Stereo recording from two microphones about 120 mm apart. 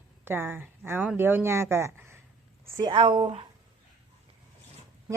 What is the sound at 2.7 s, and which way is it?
Speech, 40° right (ahead or behind).